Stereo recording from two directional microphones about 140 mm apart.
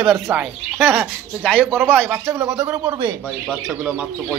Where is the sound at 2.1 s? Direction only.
25° right (ahead or behind).